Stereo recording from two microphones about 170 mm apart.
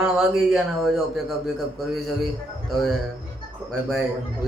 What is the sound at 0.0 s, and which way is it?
Speech, 5° right (ahead or behind).